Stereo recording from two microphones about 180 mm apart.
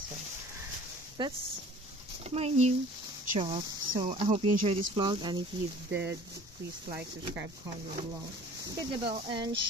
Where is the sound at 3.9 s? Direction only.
25° right (ahead or behind).